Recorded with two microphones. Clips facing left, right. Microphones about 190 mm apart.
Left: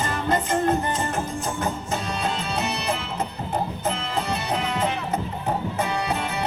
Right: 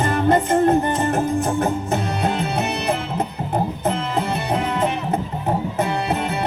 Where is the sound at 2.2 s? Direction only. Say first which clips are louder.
Right 5 dB; 60° right (ahead or behind).